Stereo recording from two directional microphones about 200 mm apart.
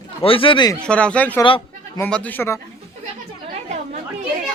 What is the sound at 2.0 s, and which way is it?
Speech, 10° left (ahead or behind).